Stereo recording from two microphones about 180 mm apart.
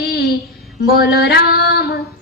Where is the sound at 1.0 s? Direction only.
65° left (ahead or behind).